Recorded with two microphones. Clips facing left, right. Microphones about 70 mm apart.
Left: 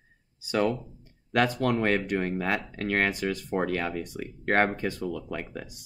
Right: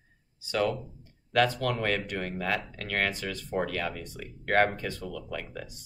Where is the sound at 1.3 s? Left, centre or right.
Left.